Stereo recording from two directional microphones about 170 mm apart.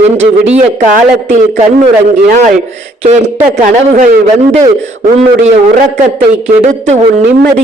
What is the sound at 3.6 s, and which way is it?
A man's voice, 40° right (ahead or behind).